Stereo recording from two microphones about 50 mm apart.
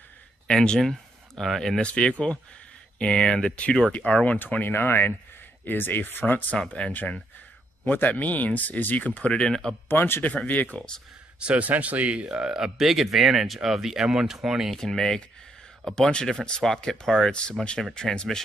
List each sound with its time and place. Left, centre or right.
0.5 s speech: centre
1.8 s speech: centre
3.9 s speech: left
9.3 s speech: centre
9.8 s speech: left
10.2 s speech: left
11.3 s speech: right
11.6 s speech: right
12.5 s speech: centre
14.7 s speech: centre